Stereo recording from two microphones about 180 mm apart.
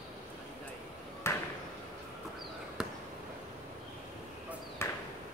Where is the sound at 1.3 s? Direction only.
15° left (ahead or behind).